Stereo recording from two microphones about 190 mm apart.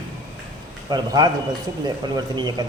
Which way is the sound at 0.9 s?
20° right (ahead or behind).